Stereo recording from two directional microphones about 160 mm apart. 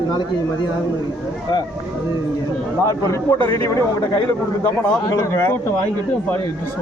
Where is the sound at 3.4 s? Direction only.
20° left (ahead or behind).